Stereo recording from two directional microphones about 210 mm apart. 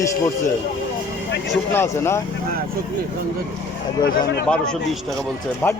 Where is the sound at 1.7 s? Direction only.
10° left (ahead or behind).